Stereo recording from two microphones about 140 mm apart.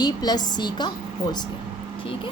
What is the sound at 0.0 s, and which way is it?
Speech, 30° left (ahead or behind).